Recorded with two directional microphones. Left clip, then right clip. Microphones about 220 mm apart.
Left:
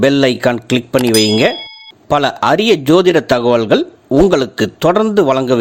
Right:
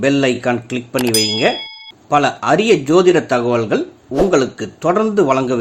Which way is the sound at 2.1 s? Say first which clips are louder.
Left 2 dB; 35° left (ahead or behind).